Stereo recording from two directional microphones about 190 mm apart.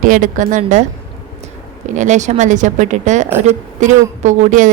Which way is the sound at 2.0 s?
40° right (ahead or behind).